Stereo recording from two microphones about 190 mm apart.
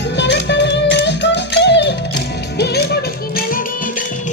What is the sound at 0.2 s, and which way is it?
Music, 65° left (ahead or behind).